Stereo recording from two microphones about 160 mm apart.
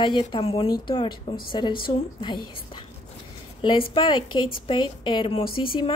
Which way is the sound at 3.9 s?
30° left (ahead or behind).